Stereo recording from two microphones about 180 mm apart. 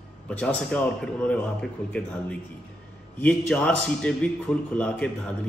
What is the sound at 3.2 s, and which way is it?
A man's voice, 5° left (ahead or behind).